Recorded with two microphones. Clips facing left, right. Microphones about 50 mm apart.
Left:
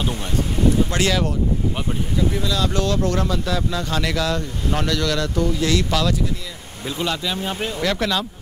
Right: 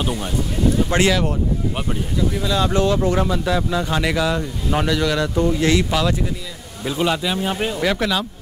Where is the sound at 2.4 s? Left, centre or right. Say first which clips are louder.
Right 3 dB; right.